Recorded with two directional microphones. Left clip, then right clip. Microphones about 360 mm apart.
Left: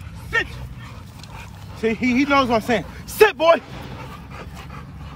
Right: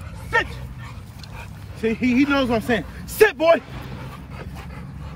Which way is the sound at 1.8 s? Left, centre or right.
Centre.